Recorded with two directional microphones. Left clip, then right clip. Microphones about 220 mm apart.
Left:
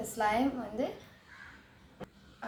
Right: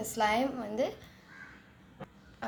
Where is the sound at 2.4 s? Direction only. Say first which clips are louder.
Right 3 dB; 40° right (ahead or behind).